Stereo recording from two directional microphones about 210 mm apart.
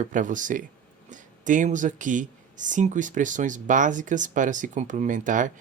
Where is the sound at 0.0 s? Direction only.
35° right (ahead or behind).